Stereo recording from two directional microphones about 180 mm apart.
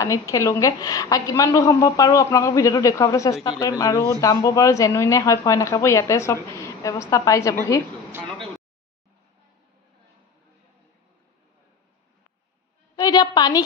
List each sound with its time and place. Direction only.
0.0 s a woman's voice: 15° left (ahead or behind)
13.0 s a woman's voice: 20° left (ahead or behind)